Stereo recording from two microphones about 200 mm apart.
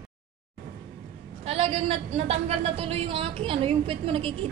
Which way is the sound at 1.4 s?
30° right (ahead or behind).